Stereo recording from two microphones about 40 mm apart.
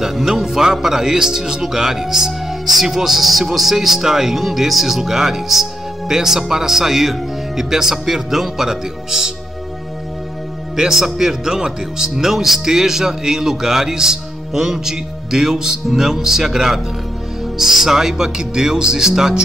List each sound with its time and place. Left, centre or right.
0.0 s a man's voice: centre
10.8 s a man's voice: centre